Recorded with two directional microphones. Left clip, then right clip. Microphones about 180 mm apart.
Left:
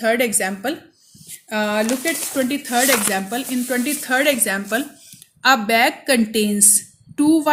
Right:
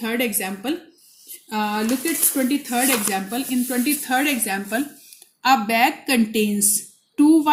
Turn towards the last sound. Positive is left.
turn(degrees=30)  # may be behind; listen again after turning